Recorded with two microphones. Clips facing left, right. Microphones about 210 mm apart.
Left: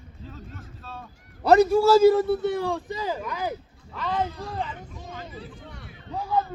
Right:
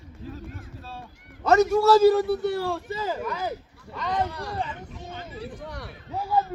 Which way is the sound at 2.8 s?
15° left (ahead or behind).